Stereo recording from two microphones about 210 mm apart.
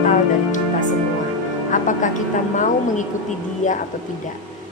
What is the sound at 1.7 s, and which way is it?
A woman's voice, 35° left (ahead or behind).